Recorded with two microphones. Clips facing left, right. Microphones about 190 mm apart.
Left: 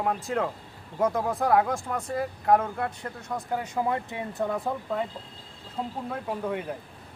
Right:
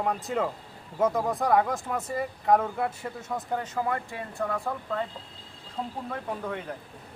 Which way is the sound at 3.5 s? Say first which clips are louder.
Left 2 dB; 10° left (ahead or behind).